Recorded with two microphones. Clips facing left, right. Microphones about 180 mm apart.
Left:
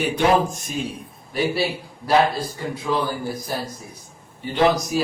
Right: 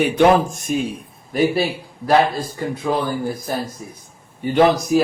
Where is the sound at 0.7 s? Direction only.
55° right (ahead or behind).